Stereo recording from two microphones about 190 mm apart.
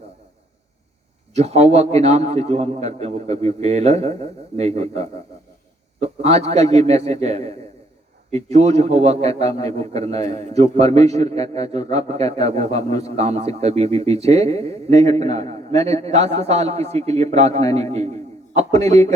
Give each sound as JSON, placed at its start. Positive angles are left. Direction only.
{"t": 1.3, "sound": "a man's voice", "side_deg": -35}